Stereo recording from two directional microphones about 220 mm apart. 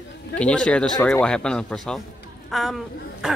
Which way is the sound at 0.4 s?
5° left (ahead or behind).